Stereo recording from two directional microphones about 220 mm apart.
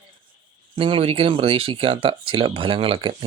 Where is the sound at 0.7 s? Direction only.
25° right (ahead or behind).